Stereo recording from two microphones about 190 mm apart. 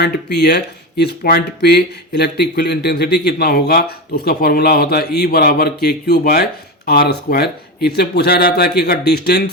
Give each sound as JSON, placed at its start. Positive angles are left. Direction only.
{"t": 0.0, "sound": "speech", "side_deg": 60}